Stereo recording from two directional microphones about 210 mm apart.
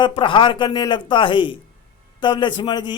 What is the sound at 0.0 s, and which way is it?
A man's voice, 25° left (ahead or behind).